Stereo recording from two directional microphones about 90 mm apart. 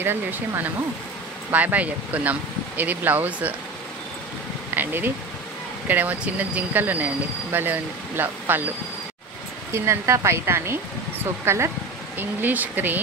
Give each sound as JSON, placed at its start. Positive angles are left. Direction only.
{"t": 0.0, "sound": "speech", "side_deg": -25}
{"t": 4.7, "sound": "bee", "side_deg": -20}
{"t": 5.9, "sound": "speech", "side_deg": -20}
{"t": 9.7, "sound": "speech", "side_deg": -30}